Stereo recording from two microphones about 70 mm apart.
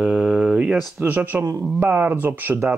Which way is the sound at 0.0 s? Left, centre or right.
Centre.